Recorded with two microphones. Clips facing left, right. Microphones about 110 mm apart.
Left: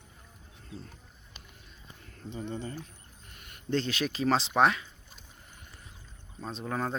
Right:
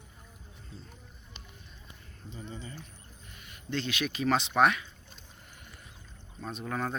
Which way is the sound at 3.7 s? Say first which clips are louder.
Left 3 dB; 35° left (ahead or behind).